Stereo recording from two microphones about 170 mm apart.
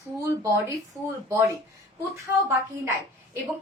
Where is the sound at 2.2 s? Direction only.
15° right (ahead or behind).